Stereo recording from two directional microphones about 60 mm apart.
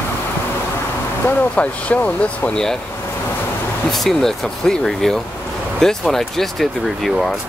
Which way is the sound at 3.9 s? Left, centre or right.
Centre.